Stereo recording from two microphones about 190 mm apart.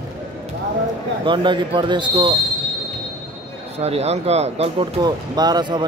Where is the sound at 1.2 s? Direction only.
25° right (ahead or behind).